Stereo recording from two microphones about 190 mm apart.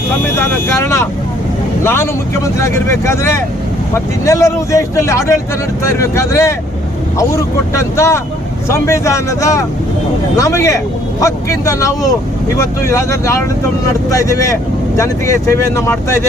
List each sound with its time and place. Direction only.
0.3 s speech: 10° left (ahead or behind)